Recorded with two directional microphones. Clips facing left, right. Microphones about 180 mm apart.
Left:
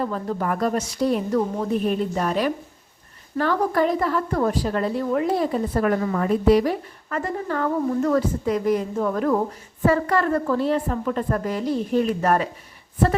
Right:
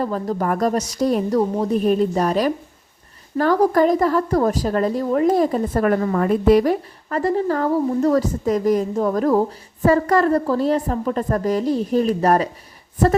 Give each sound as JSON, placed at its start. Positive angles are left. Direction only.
{"t": 0.0, "sound": "a woman's voice", "side_deg": -40}
{"t": 7.1, "sound": "a woman's voice", "side_deg": -35}